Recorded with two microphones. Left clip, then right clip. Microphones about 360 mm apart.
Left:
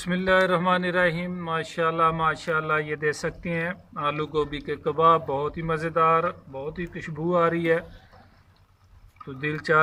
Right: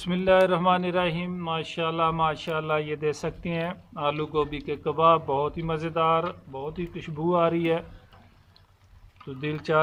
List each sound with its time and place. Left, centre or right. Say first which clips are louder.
0.3 s speech: right 1 dB; centre
6.7 s speech: even; right
7.0 s speech: left 1 dB; centre
9.4 s speech: left 3 dB; centre